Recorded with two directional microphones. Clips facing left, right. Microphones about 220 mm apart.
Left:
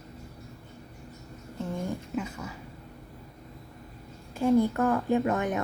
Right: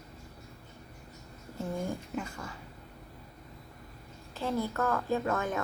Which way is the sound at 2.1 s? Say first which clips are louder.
Left 4 dB; 5° left (ahead or behind).